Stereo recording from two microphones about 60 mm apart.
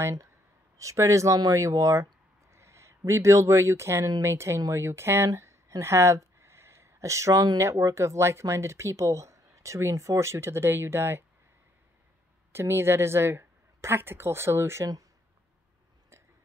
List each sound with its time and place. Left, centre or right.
0.7 s speech: right
2.5 s speech: right
7.6 s speech: right
12.5 s speech: right